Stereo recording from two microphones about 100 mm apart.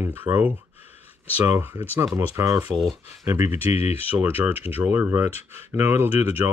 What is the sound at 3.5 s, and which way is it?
Speech, 90° left.